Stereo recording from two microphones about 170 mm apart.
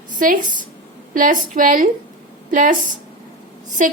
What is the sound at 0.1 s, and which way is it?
A woman's voice, 50° right (ahead or behind).